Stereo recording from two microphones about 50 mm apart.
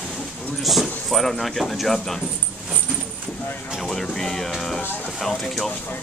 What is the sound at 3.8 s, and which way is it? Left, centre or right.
Speech, centre.